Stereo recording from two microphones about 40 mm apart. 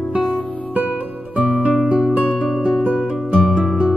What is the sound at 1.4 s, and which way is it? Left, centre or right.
Music, right.